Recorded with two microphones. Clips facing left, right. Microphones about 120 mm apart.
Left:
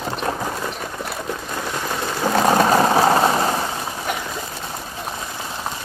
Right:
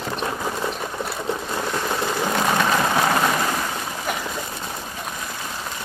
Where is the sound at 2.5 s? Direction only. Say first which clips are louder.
Left 6 dB; 35° left (ahead or behind).